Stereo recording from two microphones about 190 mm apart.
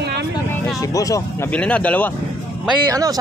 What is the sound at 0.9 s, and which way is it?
Speech, 20° left (ahead or behind).